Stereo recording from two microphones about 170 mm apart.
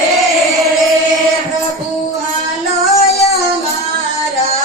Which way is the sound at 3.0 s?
40° left (ahead or behind).